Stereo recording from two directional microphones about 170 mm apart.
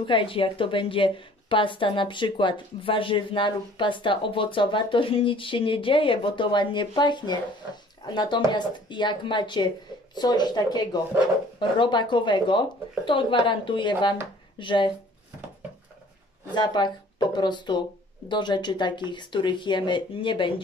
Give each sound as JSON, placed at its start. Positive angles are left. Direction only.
{"t": 0.0, "sound": "a woman's voice", "side_deg": 30}
{"t": 16.5, "sound": "a woman's voice", "side_deg": 25}